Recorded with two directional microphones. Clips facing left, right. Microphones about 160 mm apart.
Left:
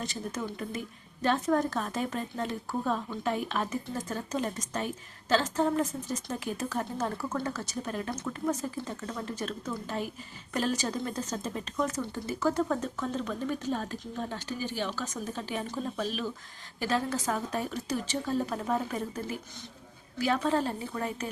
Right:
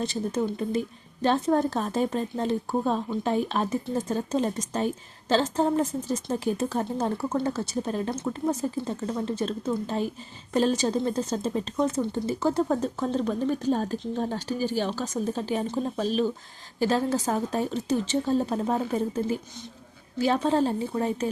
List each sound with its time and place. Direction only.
0.0 s a woman's voice: 30° right (ahead or behind)